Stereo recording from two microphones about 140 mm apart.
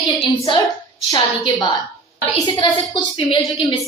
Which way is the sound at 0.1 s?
35° left (ahead or behind).